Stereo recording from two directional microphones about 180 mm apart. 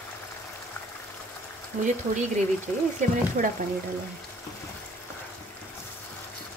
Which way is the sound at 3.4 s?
55° right (ahead or behind).